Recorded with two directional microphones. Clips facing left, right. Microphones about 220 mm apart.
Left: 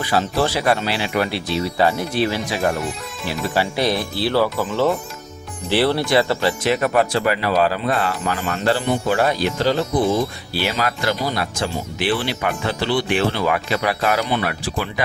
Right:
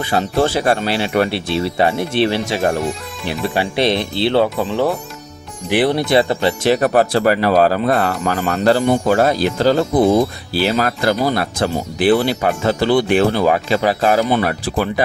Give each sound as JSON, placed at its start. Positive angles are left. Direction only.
{"t": 0.0, "sound": "speech", "side_deg": -25}
{"t": 5.6, "sound": "speech", "side_deg": -15}
{"t": 13.7, "sound": "speech", "side_deg": -30}